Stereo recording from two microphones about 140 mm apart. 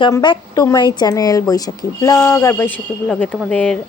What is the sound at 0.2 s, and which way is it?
Speech, 30° left (ahead or behind).